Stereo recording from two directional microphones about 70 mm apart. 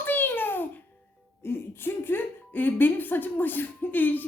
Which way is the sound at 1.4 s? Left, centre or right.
Left.